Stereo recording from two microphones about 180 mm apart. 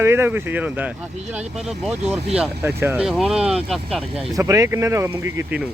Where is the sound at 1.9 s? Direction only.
5° right (ahead or behind).